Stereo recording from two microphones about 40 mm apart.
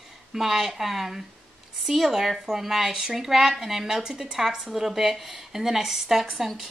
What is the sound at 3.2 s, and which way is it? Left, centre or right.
A woman's voice, centre.